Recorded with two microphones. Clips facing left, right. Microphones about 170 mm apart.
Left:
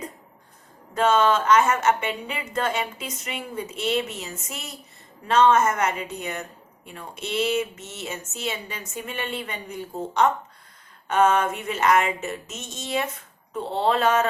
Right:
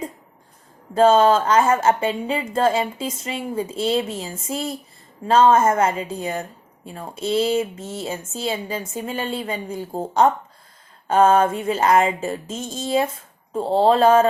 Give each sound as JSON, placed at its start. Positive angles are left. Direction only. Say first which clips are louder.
{"t": 0.9, "sound": "a woman's voice", "louder": "right 6 dB", "side_deg": -30}